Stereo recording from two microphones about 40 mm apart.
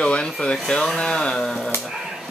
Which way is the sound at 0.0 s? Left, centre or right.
Left.